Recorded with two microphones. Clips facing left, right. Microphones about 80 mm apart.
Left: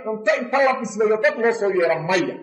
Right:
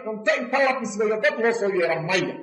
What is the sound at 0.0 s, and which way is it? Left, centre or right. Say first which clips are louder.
A man's voice: left 3 dB; centre.